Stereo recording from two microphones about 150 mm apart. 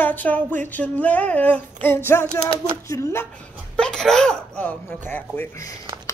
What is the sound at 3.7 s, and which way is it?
Speech, 5° left (ahead or behind).